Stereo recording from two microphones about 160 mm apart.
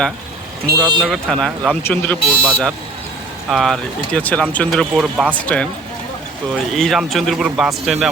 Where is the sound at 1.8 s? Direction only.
10° left (ahead or behind); by 5.3 s 5° right (ahead or behind).